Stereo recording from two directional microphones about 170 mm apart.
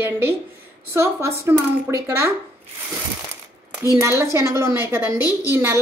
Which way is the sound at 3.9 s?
15° right (ahead or behind).